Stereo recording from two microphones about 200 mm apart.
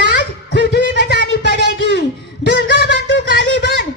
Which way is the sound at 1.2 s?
60° right (ahead or behind).